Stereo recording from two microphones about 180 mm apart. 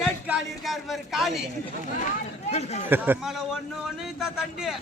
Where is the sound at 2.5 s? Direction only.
35° left (ahead or behind).